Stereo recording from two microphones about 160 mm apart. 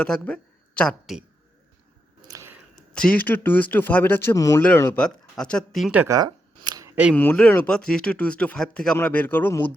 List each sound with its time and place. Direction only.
0.0 s speech: 5° left (ahead or behind)
2.2 s a sound: 20° right (ahead or behind)
2.7 s speech: 5° left (ahead or behind)
4.9 s speech: 5° left (ahead or behind)
5.9 s speech: 10° right (ahead or behind)
6.1 s camera: 25° right (ahead or behind)
7.1 s speech: 10° left (ahead or behind)